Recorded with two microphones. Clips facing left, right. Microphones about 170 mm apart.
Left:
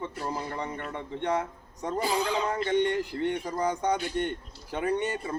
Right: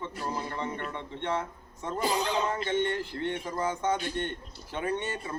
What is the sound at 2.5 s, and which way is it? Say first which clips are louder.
Speech: left 3 dB; 15° left (ahead or behind).